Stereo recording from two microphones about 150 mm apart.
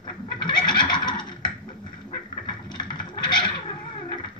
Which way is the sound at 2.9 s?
30° left (ahead or behind).